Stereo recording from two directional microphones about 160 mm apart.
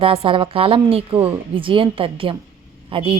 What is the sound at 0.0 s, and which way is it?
A woman's voice, 35° right (ahead or behind).